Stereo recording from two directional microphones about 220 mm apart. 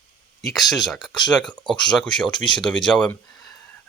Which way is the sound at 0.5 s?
Centre (ahead or behind).